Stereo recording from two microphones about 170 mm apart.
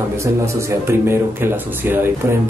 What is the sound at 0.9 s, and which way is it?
Speech, 15° right (ahead or behind).